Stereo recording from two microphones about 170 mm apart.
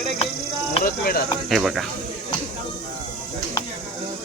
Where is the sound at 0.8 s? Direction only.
60° left (ahead or behind).